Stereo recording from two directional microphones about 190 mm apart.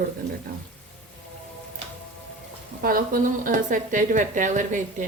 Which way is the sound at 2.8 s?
50° right (ahead or behind).